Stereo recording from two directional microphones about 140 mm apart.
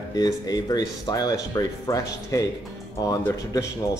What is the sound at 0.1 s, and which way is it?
Speech, 25° left (ahead or behind).